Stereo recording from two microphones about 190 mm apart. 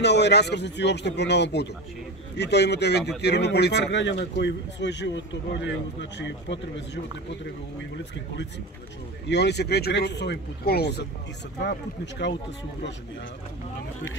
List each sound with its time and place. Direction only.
0.0 s speech: 65° left (ahead or behind)
9.3 s speech: 60° left (ahead or behind)